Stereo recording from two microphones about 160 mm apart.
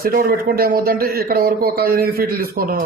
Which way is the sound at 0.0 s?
65° right (ahead or behind).